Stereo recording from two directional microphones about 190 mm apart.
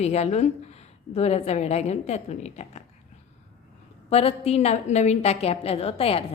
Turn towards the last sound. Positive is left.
turn(degrees=30)  # may be behind; listen again after turning